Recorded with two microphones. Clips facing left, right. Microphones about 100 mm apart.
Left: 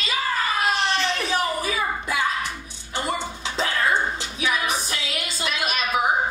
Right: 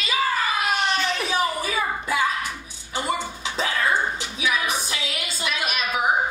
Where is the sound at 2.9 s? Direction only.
5° right (ahead or behind).